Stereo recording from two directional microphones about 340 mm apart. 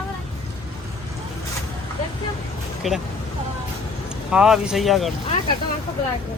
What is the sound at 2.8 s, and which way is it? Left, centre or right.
Speech, centre.